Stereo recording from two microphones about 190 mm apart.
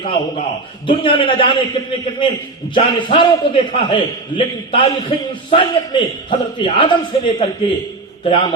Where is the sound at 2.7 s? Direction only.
25° left (ahead or behind).